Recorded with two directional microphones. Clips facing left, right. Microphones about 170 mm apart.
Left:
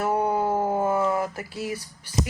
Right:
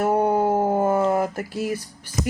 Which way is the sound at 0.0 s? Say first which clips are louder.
Right 4 dB; 45° right (ahead or behind).